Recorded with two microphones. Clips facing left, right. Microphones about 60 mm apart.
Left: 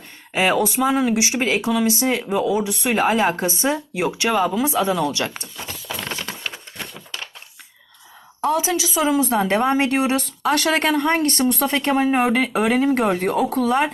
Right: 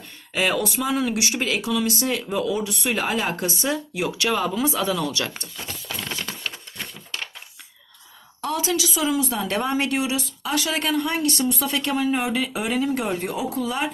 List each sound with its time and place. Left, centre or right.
0.3 s speech: left
6.2 s a sound: left
8.4 s a woman's voice: left
10.2 s speech: left
11.6 s speech: left